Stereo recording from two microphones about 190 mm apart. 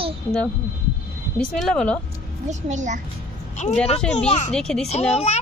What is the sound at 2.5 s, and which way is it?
Speech, 40° right (ahead or behind).